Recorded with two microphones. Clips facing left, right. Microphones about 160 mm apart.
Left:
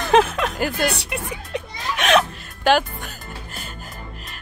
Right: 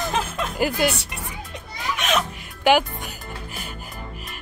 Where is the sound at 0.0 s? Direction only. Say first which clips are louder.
Left 8 dB; 70° left (ahead or behind).